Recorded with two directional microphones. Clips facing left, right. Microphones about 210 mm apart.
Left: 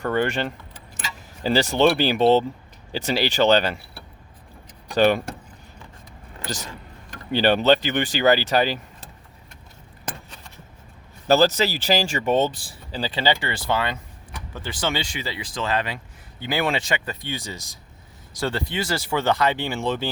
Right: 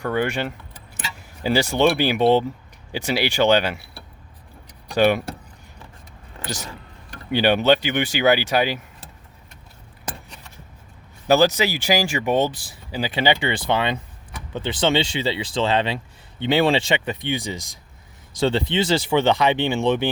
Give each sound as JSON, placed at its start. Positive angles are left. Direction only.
{"t": 0.0, "sound": "speech", "side_deg": -10}
{"t": 4.9, "sound": "speech", "side_deg": -10}
{"t": 7.3, "sound": "speech", "side_deg": -10}
{"t": 11.3, "sound": "speech", "side_deg": -10}